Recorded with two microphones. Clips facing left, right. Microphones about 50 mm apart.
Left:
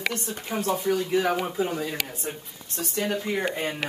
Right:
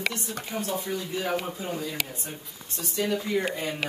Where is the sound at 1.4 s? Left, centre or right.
Left.